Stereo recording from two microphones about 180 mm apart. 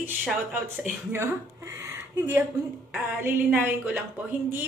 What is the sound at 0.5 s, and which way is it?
A woman's voice, 10° right (ahead or behind).